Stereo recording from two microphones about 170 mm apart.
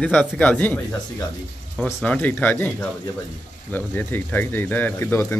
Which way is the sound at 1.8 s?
10° left (ahead or behind).